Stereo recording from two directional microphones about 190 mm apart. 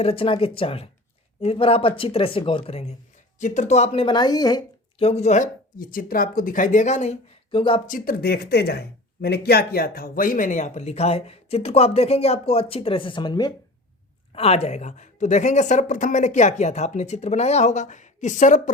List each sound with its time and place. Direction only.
0.0 s speech: 30° left (ahead or behind)
7.9 s speech: 45° left (ahead or behind); by 13.5 s 20° left (ahead or behind)
14.3 s speech: 35° left (ahead or behind)